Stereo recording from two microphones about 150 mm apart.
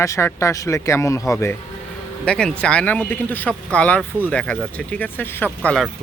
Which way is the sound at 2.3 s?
5° left (ahead or behind).